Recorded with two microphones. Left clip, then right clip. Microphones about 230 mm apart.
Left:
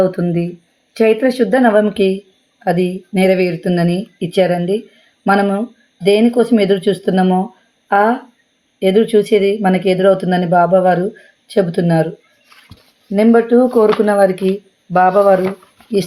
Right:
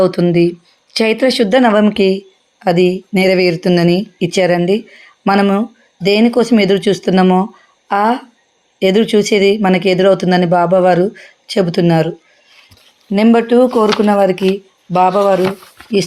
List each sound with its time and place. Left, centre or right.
0.0 s speech: right
13.1 s speech: right